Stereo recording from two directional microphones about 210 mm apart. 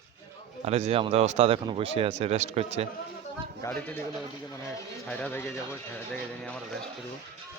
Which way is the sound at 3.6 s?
10° left (ahead or behind).